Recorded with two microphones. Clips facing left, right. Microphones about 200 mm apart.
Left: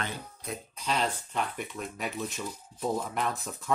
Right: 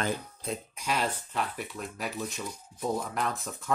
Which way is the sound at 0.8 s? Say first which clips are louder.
Left 2 dB; 10° right (ahead or behind).